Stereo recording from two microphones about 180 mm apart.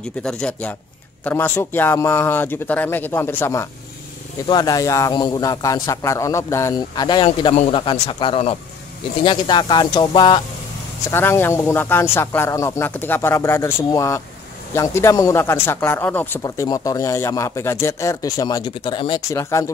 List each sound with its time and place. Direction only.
0.2 s a man's voice: 5° left (ahead or behind); by 10.4 s 25° left (ahead or behind)
11.1 s speech: 15° left (ahead or behind)